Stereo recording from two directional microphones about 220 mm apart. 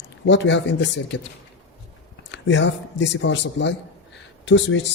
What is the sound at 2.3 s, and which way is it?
Speech, 55° left (ahead or behind).